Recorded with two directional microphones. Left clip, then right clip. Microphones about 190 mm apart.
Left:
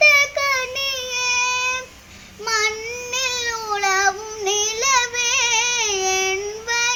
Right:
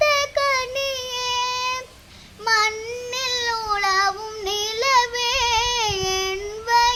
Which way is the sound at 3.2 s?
25° right (ahead or behind).